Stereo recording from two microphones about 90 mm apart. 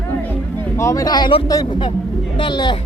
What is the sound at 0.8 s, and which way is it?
Speech, 35° left (ahead or behind).